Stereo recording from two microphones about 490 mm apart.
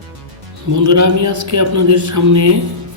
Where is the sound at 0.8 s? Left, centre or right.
Right.